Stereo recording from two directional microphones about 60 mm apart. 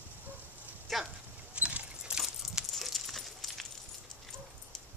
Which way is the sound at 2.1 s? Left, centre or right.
Centre.